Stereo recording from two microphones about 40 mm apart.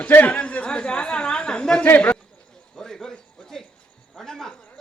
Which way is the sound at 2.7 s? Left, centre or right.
Centre.